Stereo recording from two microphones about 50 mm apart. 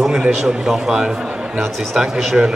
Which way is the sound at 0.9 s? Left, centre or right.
Centre.